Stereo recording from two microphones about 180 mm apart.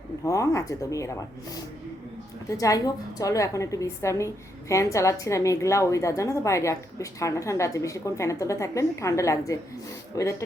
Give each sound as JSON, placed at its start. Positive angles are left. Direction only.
{"t": 0.3, "sound": "a woman's voice", "side_deg": 20}
{"t": 2.5, "sound": "a woman's voice", "side_deg": 20}